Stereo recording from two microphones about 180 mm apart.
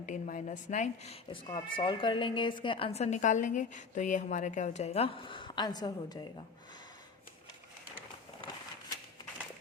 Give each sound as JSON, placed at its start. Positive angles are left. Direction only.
{"t": 0.0, "sound": "speech", "side_deg": 45}